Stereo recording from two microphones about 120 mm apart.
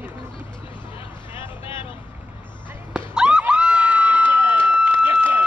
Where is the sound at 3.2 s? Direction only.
10° right (ahead or behind).